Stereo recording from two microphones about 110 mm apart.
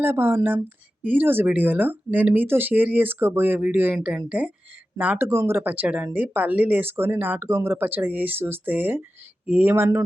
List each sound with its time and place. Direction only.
0.0 s speech: 20° right (ahead or behind)